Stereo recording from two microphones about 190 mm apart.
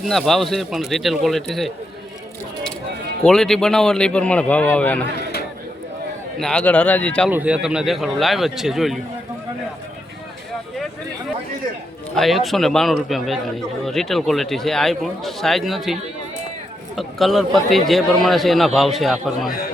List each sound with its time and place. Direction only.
0.0 s a man's voice: centre (ahead or behind)
3.2 s a man's voice: centre (ahead or behind)
6.4 s speech: 5° left (ahead or behind)
7.3 s a man's voice: 5° right (ahead or behind)
12.1 s a man's voice: centre (ahead or behind)
19.5 s a man's voice: 50° left (ahead or behind)